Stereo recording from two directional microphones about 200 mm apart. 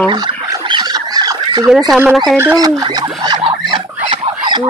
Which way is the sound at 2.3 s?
15° right (ahead or behind).